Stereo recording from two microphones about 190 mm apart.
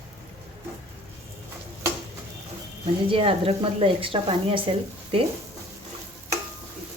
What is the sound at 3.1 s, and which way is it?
A woman's voice, 30° right (ahead or behind).